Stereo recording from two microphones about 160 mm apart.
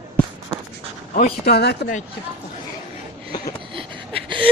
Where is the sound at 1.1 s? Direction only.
70° left (ahead or behind); by 1.7 s 85° left.